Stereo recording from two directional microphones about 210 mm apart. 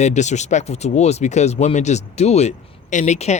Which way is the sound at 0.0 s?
35° left (ahead or behind).